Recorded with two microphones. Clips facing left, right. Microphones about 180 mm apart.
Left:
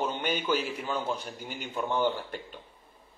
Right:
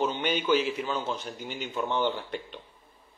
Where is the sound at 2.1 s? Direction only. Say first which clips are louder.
Right 2 dB; 40° left (ahead or behind).